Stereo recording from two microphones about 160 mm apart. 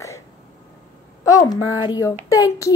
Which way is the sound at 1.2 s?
20° left (ahead or behind).